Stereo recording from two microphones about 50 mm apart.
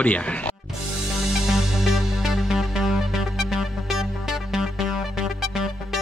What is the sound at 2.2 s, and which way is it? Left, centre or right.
Music, centre.